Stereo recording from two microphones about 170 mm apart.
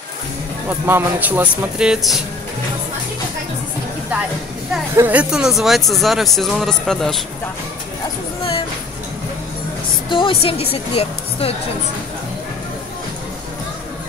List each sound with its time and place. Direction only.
0.7 s speech: 10° right (ahead or behind)
4.9 s speech: 10° right (ahead or behind)
10.0 s a woman's voice: 30° left (ahead or behind)